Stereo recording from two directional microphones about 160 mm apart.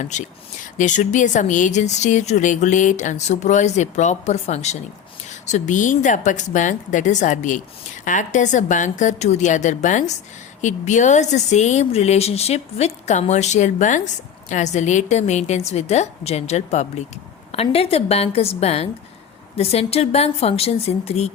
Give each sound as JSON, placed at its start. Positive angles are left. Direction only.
{"t": 0.0, "sound": "a woman's voice", "side_deg": 50}